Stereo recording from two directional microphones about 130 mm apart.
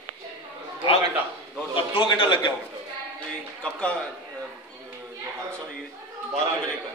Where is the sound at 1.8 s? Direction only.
40° left (ahead or behind).